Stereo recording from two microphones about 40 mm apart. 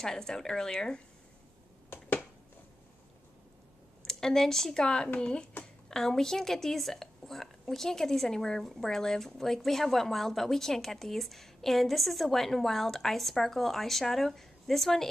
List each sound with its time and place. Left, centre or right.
0.0 s a woman's voice: centre
4.0 s speech: centre
5.9 s a woman's voice: centre